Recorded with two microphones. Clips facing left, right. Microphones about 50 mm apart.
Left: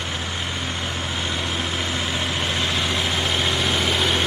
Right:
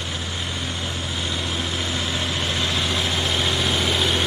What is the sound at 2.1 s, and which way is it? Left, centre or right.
Vehicle, left.